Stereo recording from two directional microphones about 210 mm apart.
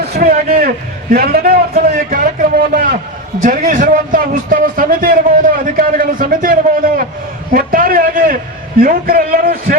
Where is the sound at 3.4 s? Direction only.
40° right (ahead or behind).